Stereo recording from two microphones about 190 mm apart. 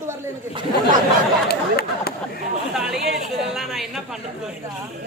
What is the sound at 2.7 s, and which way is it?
Speech, 5° right (ahead or behind).